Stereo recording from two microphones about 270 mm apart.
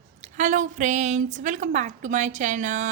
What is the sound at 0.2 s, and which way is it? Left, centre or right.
A woman's voice, right.